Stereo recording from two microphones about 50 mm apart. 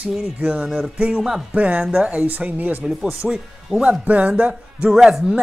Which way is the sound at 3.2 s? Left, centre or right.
Centre.